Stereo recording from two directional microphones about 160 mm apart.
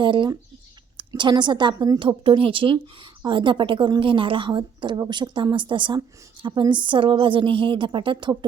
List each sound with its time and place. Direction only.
0.0 s a woman's voice: 30° right (ahead or behind)